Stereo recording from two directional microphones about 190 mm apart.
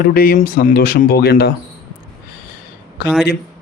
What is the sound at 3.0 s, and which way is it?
Speech, 55° left (ahead or behind).